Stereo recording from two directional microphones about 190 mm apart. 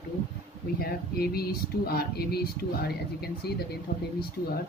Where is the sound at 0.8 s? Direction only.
55° left (ahead or behind).